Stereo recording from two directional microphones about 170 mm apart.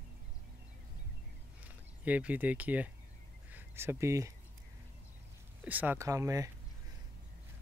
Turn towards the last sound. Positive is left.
turn(degrees=-20)  # may be behind; listen again after turning